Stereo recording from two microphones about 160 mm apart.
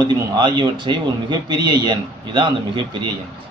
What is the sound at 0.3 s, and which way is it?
A man's voice, 30° right (ahead or behind).